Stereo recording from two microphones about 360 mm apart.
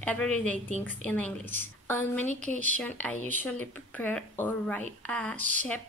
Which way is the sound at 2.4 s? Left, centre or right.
Right.